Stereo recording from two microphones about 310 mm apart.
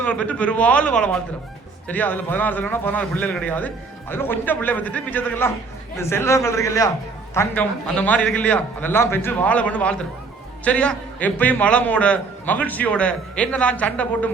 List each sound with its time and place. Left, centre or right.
0.0 s a man's voice: centre